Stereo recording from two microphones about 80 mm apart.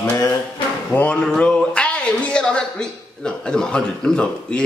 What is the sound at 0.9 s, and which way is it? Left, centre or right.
Speech, centre.